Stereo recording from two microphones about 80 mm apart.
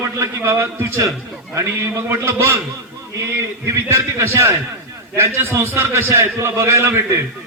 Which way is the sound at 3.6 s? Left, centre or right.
Right.